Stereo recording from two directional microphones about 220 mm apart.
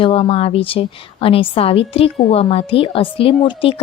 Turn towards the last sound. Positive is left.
turn(degrees=25)  # may be behind; listen again after turning